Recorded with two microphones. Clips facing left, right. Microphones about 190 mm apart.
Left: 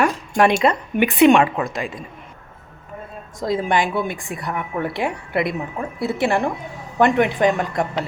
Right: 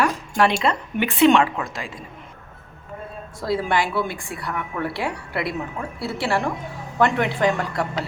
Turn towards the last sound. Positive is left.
turn(degrees=20)  # may be behind; listen again after turning